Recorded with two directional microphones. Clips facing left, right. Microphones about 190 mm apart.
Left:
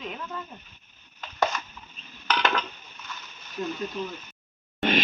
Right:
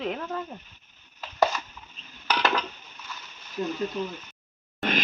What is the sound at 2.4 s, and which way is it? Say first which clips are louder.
Dishes: right 1 dB; 5° right (ahead or behind).